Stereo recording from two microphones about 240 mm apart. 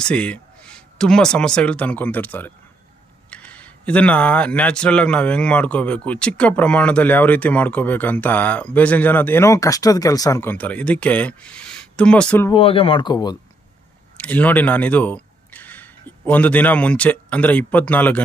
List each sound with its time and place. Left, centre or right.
0.0 s a man's voice: centre
12.5 s speech: left
14.2 s speech: centre